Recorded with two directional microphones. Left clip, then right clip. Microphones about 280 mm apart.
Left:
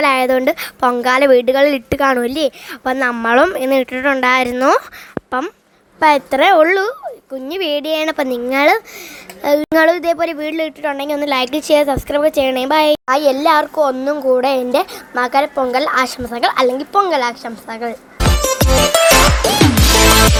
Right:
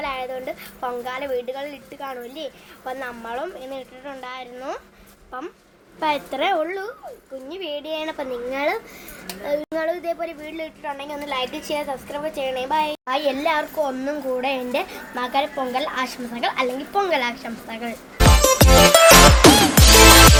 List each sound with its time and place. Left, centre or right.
0.0 s a woman's voice: left
6.0 s a child's voice: left
18.4 s music: centre